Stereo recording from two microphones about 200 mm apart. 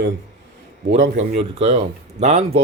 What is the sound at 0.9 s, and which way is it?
Speech, 35° right (ahead or behind).